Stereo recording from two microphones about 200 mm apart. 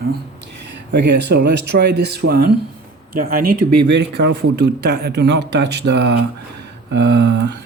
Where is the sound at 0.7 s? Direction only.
60° right (ahead or behind); by 3.5 s 45° right (ahead or behind).